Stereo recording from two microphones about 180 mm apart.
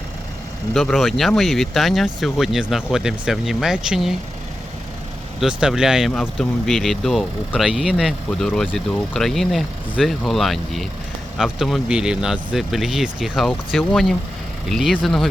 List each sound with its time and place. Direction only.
0.7 s speech: centre (ahead or behind)
5.4 s speech: 5° right (ahead or behind)